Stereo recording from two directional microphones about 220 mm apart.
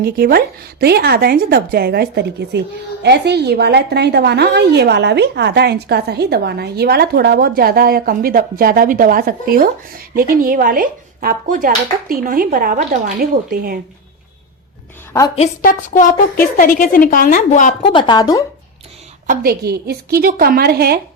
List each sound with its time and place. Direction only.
0.0 s a woman's voice: 45° right (ahead or behind)
15.4 s a woman's voice: 40° left (ahead or behind)
17.9 s speech: 20° left (ahead or behind)
19.3 s a woman's voice: 45° right (ahead or behind)